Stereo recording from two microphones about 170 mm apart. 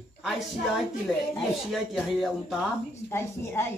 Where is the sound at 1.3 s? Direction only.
Centre (ahead or behind).